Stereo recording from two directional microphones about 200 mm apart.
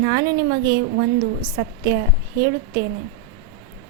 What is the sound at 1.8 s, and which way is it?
A woman's voice, 50° right (ahead or behind).